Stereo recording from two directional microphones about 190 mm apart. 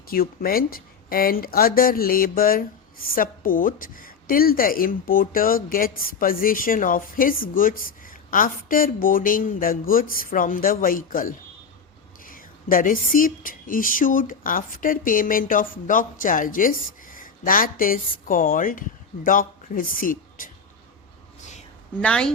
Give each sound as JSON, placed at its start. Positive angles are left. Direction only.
{"t": 0.1, "sound": "a woman's voice", "side_deg": 50}
{"t": 22.0, "sound": "a woman's voice", "side_deg": 5}